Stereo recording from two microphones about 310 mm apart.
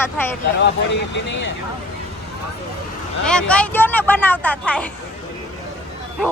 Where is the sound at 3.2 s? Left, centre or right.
Centre.